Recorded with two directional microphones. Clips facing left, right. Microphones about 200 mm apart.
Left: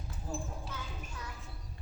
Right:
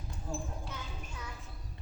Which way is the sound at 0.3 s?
5° left (ahead or behind).